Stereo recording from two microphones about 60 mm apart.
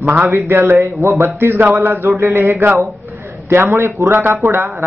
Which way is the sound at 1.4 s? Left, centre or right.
Right.